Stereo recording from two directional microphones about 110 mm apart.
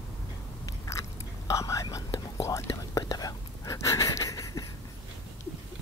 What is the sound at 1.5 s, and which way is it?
Whispering, 30° left (ahead or behind).